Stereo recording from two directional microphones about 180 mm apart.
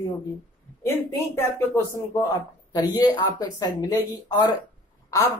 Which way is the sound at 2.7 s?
20° left (ahead or behind).